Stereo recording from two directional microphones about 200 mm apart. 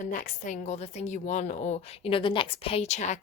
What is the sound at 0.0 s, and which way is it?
A woman's voice, 40° left (ahead or behind).